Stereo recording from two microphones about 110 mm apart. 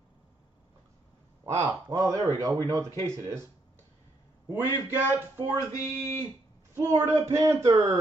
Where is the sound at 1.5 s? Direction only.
30° right (ahead or behind).